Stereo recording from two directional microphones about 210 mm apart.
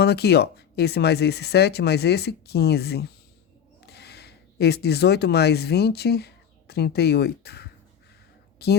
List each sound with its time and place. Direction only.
0.0 s speech: 50° left (ahead or behind)